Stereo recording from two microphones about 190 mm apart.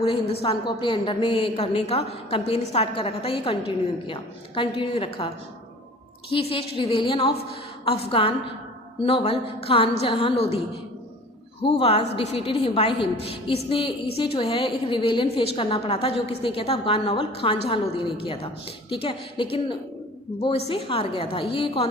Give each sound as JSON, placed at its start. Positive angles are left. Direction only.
{"t": 0.0, "sound": "a woman's voice", "side_deg": 30}
{"t": 6.3, "sound": "a woman's voice", "side_deg": 30}
{"t": 11.6, "sound": "a woman's voice", "side_deg": 30}